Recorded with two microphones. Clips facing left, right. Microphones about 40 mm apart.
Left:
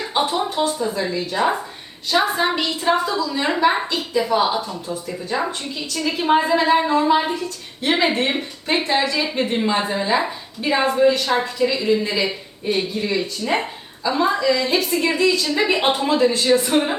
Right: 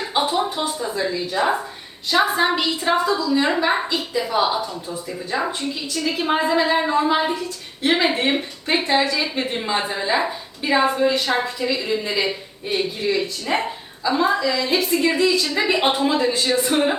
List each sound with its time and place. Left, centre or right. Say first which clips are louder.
0.1 s a woman's voice: even; centre
11.3 s a woman's voice: left 2 dB; centre